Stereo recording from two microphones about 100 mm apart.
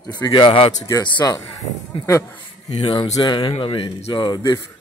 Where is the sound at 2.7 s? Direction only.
65° left (ahead or behind).